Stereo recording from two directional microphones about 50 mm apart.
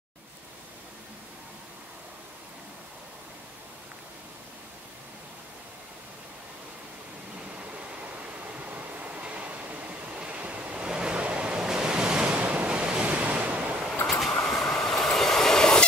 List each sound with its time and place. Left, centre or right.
8.2 s train: right
14.4 s train: centre